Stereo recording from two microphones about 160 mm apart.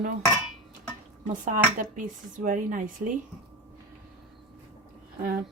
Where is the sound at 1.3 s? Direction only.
55° right (ahead or behind).